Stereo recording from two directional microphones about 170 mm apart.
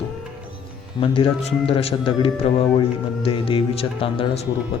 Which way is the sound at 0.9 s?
30° left (ahead or behind).